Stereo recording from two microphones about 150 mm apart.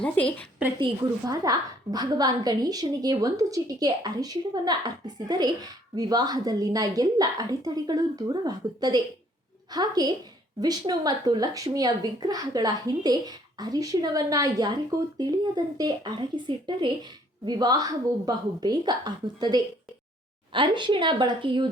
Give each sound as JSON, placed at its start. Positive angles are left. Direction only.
{"t": 0.0, "sound": "a woman's voice", "side_deg": 10}
{"t": 1.3, "sound": "a woman's voice", "side_deg": -25}